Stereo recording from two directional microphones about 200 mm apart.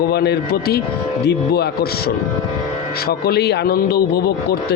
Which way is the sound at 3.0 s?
50° left (ahead or behind).